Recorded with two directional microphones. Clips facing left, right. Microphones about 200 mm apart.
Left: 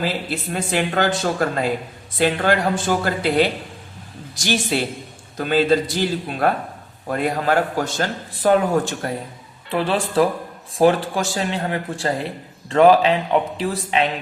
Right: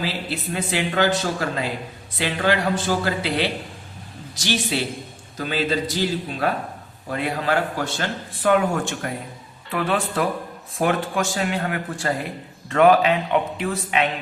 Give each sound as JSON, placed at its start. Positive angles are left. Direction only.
{"t": 0.0, "sound": "speech", "side_deg": 50}
{"t": 5.5, "sound": "a man's voice", "side_deg": 50}